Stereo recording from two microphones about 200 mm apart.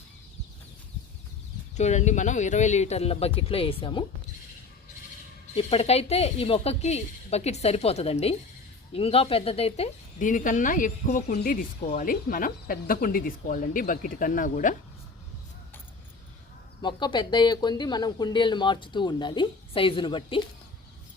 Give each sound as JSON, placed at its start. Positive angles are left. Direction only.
{"t": 1.7, "sound": "speech", "side_deg": 35}
{"t": 5.5, "sound": "speech", "side_deg": 30}
{"t": 16.8, "sound": "speech", "side_deg": 25}